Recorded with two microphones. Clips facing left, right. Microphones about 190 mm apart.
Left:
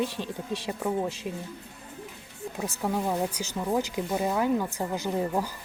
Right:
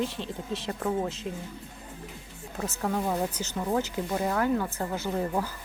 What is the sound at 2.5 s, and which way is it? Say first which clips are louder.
Speech: even; 10° left (ahead or behind).